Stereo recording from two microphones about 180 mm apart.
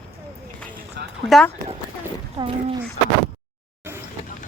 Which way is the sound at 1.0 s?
65° right (ahead or behind).